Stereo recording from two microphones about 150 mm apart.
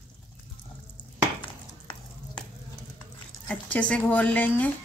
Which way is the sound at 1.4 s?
30° left (ahead or behind).